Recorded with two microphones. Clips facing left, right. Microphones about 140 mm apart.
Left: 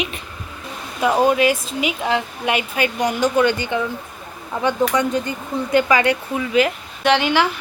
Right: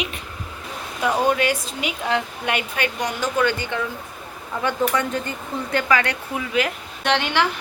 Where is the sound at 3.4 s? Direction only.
20° left (ahead or behind).